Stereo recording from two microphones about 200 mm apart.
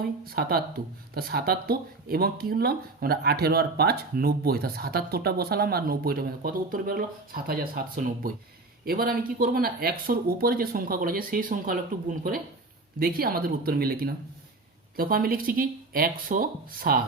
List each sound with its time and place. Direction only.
0.0 s speech: 50° right (ahead or behind)
13.0 s speech: 50° right (ahead or behind)